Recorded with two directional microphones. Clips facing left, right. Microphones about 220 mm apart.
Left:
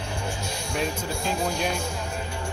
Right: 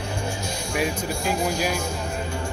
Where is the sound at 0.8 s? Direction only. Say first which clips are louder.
Right 3 dB; 5° right (ahead or behind).